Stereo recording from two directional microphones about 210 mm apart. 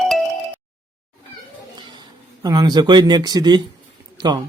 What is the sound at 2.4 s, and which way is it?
Speech, 20° right (ahead or behind).